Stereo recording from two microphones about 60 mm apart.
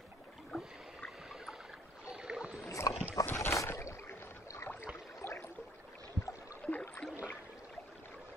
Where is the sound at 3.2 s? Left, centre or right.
Left.